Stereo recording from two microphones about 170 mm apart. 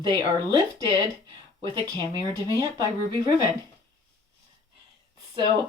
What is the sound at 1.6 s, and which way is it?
Speech, 25° right (ahead or behind).